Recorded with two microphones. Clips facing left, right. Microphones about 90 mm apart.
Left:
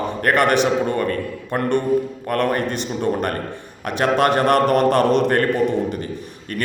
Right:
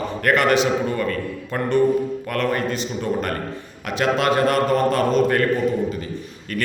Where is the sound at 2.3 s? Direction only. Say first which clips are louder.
Left 4 dB; 45° left (ahead or behind); by 5.3 s 65° left (ahead or behind).